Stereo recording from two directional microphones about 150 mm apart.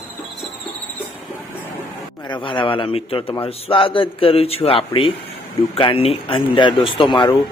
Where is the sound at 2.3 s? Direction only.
35° left (ahead or behind).